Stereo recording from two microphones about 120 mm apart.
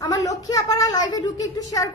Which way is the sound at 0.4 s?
30° left (ahead or behind).